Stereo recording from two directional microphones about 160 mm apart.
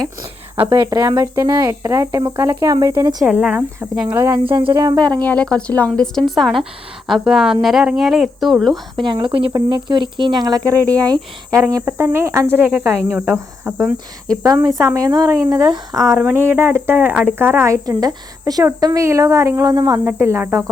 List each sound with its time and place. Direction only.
0.7 s a woman's voice: 20° right (ahead or behind)
3.2 s speech: 10° right (ahead or behind)
4.5 s a woman's voice: 25° right (ahead or behind)
5.2 s speech: 10° left (ahead or behind)
9.0 s a woman's voice: 30° right (ahead or behind); by 13.3 s 10° right (ahead or behind)
14.4 s a woman's voice: 25° right (ahead or behind)